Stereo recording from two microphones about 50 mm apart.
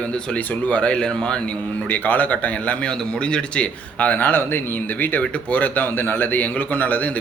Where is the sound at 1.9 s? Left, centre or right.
Left.